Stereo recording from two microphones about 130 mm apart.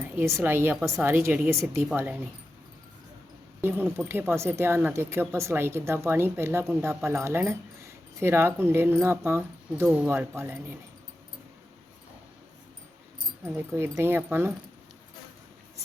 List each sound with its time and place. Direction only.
0.0 s speech: 20° right (ahead or behind)
3.6 s speech: 15° right (ahead or behind)
13.4 s speech: 20° right (ahead or behind)